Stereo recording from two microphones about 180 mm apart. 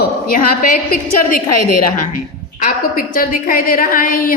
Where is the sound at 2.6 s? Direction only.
50° left (ahead or behind).